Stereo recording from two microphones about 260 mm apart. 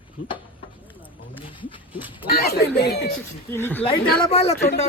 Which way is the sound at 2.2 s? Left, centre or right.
Left.